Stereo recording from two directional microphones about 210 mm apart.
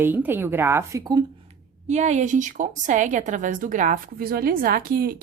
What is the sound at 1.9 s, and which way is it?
A woman's voice, 35° right (ahead or behind).